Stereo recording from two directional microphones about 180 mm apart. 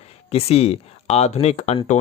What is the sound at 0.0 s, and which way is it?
Speech, 35° left (ahead or behind).